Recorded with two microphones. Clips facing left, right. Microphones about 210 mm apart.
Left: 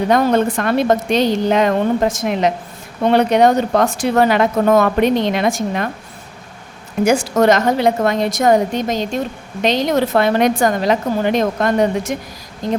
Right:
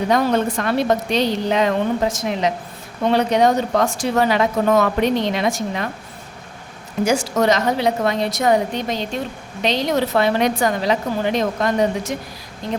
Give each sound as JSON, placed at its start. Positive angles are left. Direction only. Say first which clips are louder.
{"t": 0.1, "sound": "speech", "louder": "left 3 dB", "side_deg": 55}
{"t": 7.0, "sound": "speech", "louder": "left 4 dB", "side_deg": 55}
{"t": 12.6, "sound": "speech", "louder": "left 5 dB", "side_deg": 40}